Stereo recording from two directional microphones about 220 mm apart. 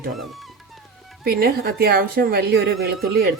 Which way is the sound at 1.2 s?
45° right (ahead or behind).